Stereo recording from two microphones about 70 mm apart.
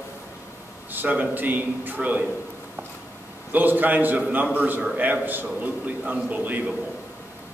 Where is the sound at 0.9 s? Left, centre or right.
Right.